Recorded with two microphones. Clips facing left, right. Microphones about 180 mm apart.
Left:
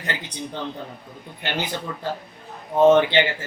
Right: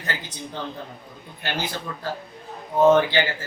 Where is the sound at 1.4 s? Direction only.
20° left (ahead or behind).